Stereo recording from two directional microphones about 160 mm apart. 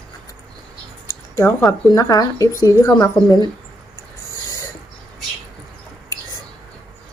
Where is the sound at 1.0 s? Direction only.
15° left (ahead or behind).